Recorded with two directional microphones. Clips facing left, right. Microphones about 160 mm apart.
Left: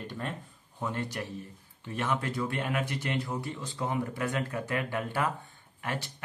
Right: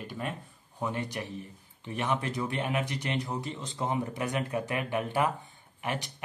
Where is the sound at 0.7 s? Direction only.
15° right (ahead or behind).